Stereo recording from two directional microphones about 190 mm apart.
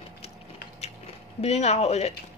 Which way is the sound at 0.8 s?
35° left (ahead or behind).